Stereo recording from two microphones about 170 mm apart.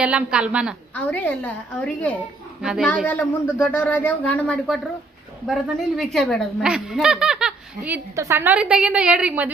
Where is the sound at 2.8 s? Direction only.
5° left (ahead or behind).